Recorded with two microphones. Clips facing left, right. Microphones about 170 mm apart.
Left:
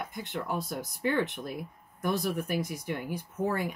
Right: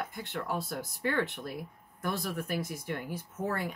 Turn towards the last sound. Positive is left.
turn(degrees=10)  # may be behind; listen again after turning